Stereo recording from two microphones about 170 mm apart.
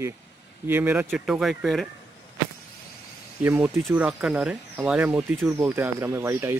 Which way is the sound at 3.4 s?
10° right (ahead or behind).